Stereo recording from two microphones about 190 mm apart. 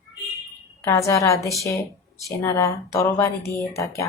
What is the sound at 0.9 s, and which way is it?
A woman's voice, 15° left (ahead or behind).